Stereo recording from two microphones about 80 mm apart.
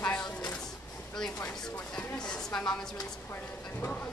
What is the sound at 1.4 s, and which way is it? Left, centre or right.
A woman's voice, centre.